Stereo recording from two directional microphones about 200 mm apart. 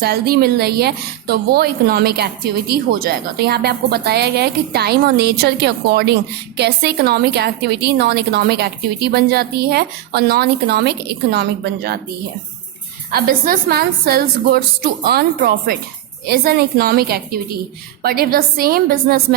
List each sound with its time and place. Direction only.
0.0 s a woman's voice: 50° right (ahead or behind)
13.1 s a woman's voice: 50° right (ahead or behind)